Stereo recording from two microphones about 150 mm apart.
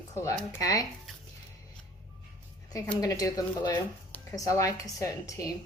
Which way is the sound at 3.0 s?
25° left (ahead or behind).